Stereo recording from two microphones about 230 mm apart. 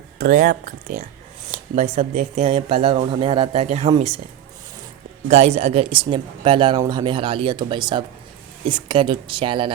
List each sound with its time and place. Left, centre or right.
0.2 s speech: right
5.3 s speech: right